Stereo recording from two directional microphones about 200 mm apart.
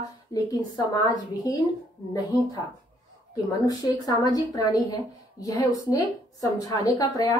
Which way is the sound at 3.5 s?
20° left (ahead or behind).